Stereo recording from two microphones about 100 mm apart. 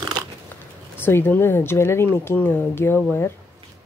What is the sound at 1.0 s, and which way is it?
Speech, 20° left (ahead or behind).